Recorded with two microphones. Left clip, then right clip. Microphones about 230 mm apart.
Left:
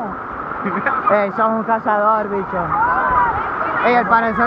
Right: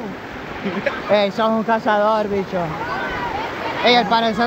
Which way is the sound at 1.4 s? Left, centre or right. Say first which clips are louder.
Left 1 dB; centre.